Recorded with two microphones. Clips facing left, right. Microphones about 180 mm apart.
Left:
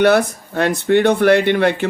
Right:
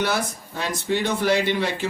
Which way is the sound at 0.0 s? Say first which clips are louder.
Left 11 dB; 60° left (ahead or behind).